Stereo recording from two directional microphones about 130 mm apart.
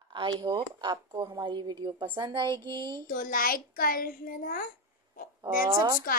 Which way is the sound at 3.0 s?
90° left.